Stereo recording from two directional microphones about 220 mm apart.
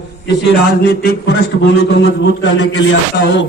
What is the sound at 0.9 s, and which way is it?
A man's voice, 45° left (ahead or behind).